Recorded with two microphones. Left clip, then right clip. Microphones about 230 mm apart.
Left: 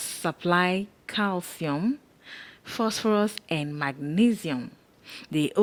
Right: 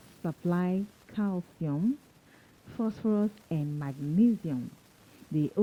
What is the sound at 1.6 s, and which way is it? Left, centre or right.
Speech, left.